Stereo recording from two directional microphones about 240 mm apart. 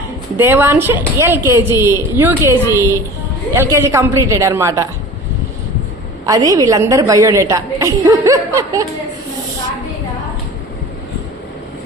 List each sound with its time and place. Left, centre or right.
0.3 s a woman's voice: centre
6.2 s a woman's voice: centre